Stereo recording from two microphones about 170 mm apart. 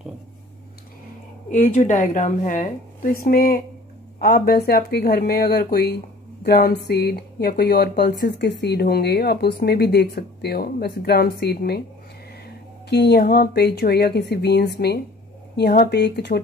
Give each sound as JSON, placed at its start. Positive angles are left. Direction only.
{"t": 1.5, "sound": "a woman's voice", "side_deg": 45}